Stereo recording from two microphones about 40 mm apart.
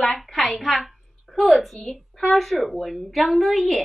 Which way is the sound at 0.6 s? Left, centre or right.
Centre.